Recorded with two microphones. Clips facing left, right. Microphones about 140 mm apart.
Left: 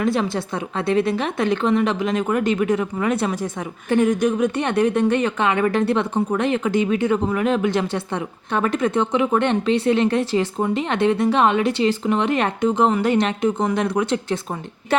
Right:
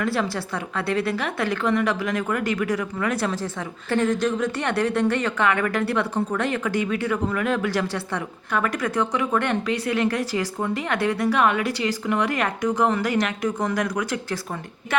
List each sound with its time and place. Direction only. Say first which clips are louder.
0.0 s a woman's voice: left 4 dB; 20° left (ahead or behind)